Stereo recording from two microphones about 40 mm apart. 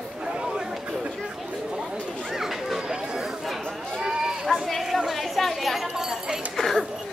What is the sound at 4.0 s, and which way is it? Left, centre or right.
Sheep, centre.